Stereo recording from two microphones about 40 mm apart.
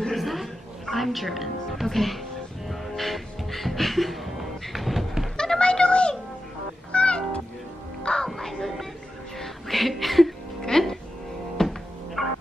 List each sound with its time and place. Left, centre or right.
0.1 s music: centre
5.4 s a sound: left
6.9 s music: left
8.3 s music: centre
10.6 s music: centre